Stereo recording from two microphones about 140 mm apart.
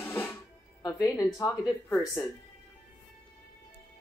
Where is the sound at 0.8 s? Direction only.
25° left (ahead or behind).